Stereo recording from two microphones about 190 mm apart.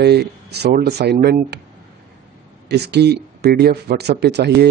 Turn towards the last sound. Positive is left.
turn(degrees=-60)  # may be behind; listen again after turning